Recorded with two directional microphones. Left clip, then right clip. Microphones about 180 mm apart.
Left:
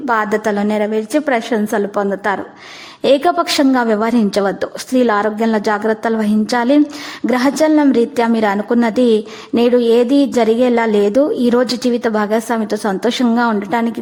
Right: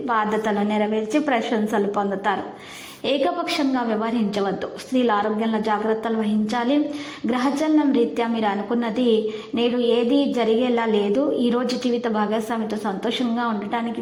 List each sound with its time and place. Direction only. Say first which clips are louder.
0.1 s a woman's voice: left 6 dB; 35° left (ahead or behind)
3.0 s a woman's voice: left 9 dB; 45° left (ahead or behind)